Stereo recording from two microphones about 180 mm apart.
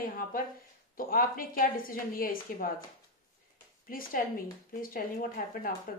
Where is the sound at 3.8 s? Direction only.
55° left (ahead or behind).